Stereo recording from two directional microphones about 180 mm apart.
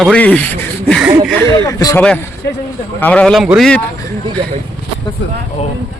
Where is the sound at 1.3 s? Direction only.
15° left (ahead or behind).